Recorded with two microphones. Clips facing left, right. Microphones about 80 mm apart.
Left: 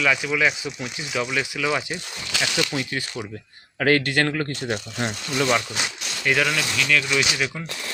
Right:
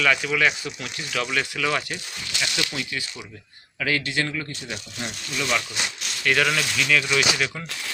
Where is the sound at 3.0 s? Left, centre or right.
Left.